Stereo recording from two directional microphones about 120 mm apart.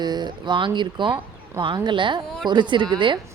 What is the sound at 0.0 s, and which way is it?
A woman's voice, 35° right (ahead or behind).